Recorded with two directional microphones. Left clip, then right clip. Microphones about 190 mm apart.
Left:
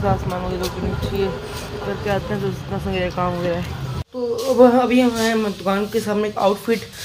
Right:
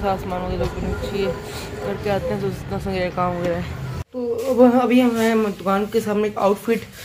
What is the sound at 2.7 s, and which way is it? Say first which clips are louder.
Speech: left 1 dB; 15° right (ahead or behind).